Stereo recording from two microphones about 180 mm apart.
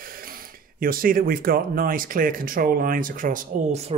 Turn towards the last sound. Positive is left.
turn(degrees=-50)  # may be behind; listen again after turning